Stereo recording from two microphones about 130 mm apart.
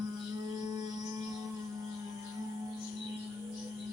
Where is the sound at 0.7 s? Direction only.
30° right (ahead or behind).